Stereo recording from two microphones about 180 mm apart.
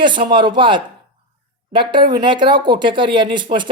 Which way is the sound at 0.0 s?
25° right (ahead or behind).